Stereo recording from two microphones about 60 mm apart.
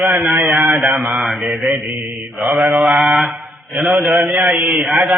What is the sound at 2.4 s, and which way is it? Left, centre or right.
Mantra, centre.